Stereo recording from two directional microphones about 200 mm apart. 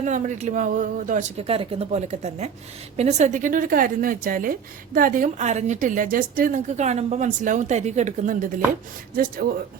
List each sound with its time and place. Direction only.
0.0 s a woman's voice: 40° right (ahead or behind)